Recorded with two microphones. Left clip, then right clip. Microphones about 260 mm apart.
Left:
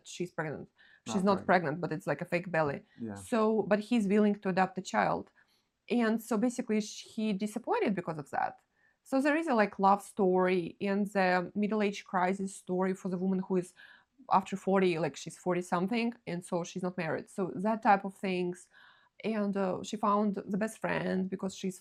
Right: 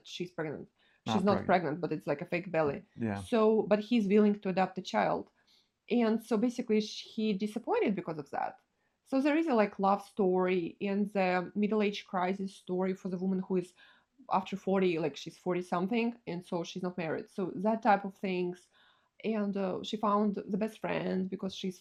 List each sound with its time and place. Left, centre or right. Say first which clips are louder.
0.2 s speech: left 1 dB; centre